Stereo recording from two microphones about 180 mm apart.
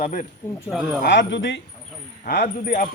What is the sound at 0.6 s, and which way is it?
Speech, 5° right (ahead or behind).